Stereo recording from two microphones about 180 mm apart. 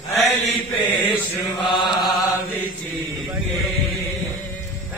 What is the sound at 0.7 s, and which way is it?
Chant, 10° left (ahead or behind).